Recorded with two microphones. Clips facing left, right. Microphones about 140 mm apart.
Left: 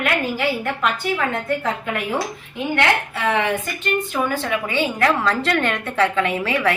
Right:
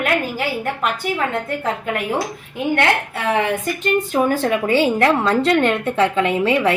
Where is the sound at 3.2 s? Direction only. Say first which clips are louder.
Right 2 dB; 40° right (ahead or behind).